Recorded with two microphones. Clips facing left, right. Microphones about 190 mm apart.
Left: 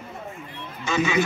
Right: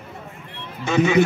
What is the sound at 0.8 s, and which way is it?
Speech, 55° right (ahead or behind).